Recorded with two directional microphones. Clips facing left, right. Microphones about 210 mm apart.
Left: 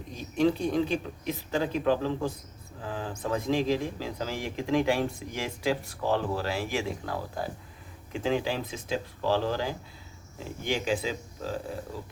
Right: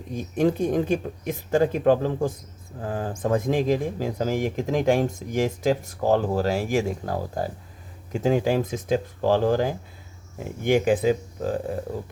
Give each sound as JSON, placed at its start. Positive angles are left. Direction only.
{"t": 0.1, "sound": "speech", "side_deg": -50}